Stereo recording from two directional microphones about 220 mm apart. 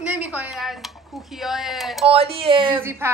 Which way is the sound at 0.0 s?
5° right (ahead or behind).